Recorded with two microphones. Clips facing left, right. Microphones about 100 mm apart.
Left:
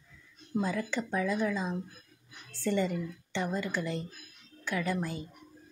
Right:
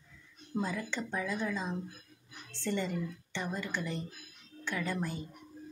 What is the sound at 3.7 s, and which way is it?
Speech, 15° right (ahead or behind).